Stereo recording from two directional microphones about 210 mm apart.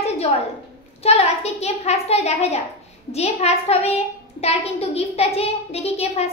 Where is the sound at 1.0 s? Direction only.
30° left (ahead or behind).